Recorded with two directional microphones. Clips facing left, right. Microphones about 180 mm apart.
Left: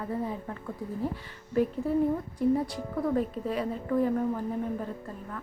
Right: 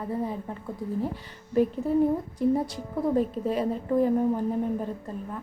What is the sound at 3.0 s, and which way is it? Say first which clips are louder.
A woman's voice: right 4 dB; 25° right (ahead or behind).